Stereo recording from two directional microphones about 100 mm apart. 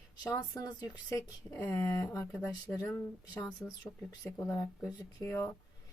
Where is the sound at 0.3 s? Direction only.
40° left (ahead or behind).